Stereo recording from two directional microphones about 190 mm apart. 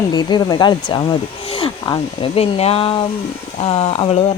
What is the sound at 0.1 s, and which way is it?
Speech, 20° left (ahead or behind).